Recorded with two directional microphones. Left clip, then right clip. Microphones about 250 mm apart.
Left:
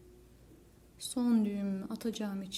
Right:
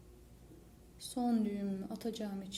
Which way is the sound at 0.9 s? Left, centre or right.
Left.